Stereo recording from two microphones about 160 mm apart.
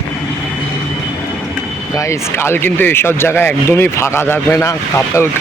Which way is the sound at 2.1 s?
15° left (ahead or behind).